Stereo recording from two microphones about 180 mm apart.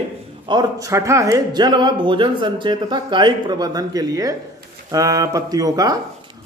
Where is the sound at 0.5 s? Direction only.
20° right (ahead or behind).